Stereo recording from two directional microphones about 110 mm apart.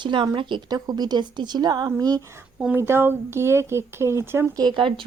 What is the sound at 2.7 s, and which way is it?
Speech, 20° right (ahead or behind).